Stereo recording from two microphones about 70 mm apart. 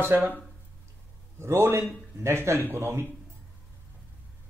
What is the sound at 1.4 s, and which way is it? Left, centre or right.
Speech, right.